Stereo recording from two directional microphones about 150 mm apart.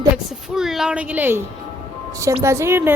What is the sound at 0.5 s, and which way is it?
Speech, 5° right (ahead or behind).